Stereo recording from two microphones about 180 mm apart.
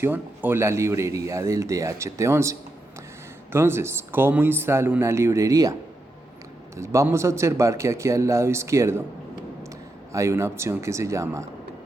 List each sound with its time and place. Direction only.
0.0 s speech: 10° right (ahead or behind)
6.7 s speech: 15° right (ahead or behind)
10.1 s speech: 15° right (ahead or behind)